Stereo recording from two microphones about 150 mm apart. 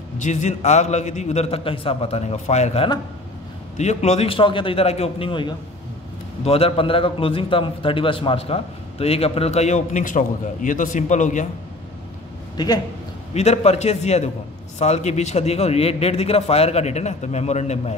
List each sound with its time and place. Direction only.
0.2 s a man's voice: 50° left (ahead or behind)
12.5 s speech: 25° left (ahead or behind)
13.3 s a man's voice: 45° left (ahead or behind)